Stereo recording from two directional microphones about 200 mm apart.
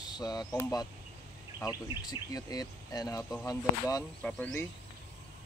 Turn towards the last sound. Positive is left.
turn(degrees=10)  # may be behind; listen again after turning